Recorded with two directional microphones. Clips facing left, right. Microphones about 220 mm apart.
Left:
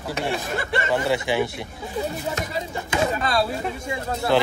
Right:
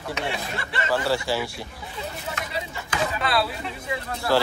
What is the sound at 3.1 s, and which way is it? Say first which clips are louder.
Speech: left 2 dB; 45° left (ahead or behind).